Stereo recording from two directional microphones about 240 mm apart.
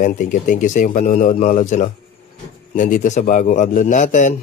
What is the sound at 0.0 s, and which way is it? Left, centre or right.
A man's voice, left.